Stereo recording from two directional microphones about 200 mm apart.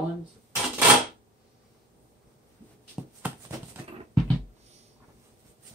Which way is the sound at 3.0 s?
5° right (ahead or behind).